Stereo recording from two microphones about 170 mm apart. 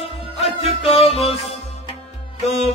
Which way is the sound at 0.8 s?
35° left (ahead or behind).